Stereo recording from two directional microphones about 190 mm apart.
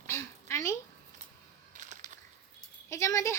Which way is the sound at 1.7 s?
40° right (ahead or behind).